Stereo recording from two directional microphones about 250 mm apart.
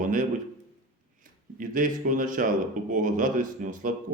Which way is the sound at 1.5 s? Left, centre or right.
Right.